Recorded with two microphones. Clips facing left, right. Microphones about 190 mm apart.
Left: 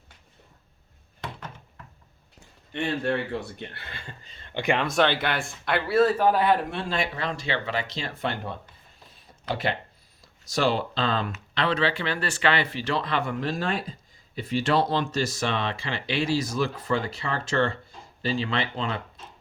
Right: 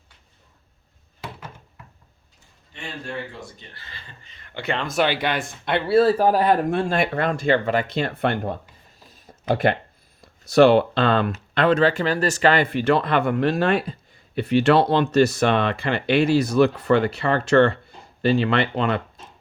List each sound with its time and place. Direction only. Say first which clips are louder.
2.7 s speech: left 6 dB; 65° left (ahead or behind)
4.4 s a sound: left 3 dB; 25° left (ahead or behind)
4.6 s speech: left 2 dB; 10° left (ahead or behind)
4.9 s speech: right 2 dB; 5° right (ahead or behind); by 8.5 s 60° right (ahead or behind)
9.1 s a sound: right 8 dB; 55° right (ahead or behind)
10.2 s speech: right 13 dB; 60° right (ahead or behind)
11.5 s speech: right 7 dB; 50° right (ahead or behind)